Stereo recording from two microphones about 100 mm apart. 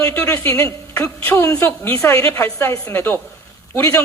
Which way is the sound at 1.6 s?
20° left (ahead or behind).